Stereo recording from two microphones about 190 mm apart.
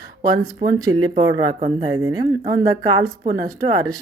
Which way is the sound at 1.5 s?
30° right (ahead or behind).